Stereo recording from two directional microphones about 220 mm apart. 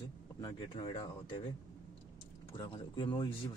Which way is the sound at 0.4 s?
20° left (ahead or behind).